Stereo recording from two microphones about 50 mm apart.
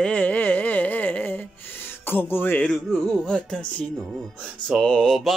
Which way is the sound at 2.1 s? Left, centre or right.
Left.